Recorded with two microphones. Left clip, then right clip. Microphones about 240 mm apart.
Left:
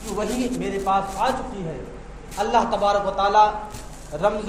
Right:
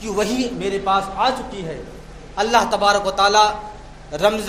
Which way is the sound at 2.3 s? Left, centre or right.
Right.